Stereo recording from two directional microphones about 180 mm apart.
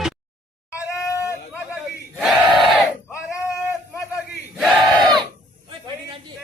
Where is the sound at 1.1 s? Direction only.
15° left (ahead or behind).